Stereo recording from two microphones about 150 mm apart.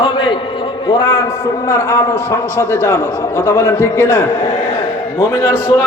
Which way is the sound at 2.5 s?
20° right (ahead or behind).